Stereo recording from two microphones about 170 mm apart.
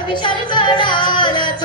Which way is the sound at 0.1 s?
25° left (ahead or behind).